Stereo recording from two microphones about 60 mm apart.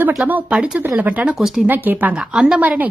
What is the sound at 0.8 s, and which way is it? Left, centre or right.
Speech, right.